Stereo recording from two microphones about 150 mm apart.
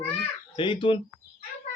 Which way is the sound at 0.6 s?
35° left (ahead or behind).